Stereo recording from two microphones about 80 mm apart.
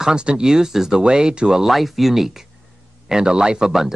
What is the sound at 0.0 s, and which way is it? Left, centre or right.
Speech, centre.